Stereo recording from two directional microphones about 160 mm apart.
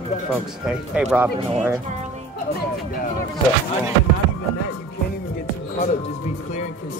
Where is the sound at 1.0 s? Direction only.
5° right (ahead or behind).